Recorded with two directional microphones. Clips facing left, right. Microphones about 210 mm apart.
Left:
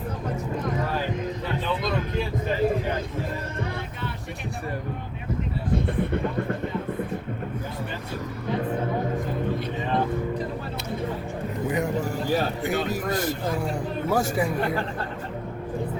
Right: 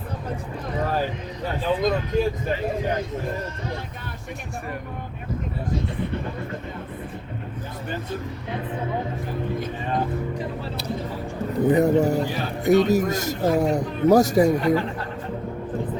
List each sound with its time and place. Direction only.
1.5 s music: 45° right (ahead or behind)
6.0 s vehicle: 55° left (ahead or behind)
11.7 s speech: 35° right (ahead or behind)